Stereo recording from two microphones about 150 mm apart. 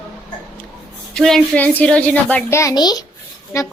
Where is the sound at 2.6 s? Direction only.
25° left (ahead or behind).